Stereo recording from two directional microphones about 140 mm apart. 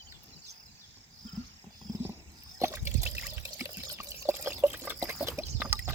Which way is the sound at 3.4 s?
25° right (ahead or behind).